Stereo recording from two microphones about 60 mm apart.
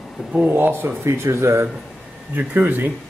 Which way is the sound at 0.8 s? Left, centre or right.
Right.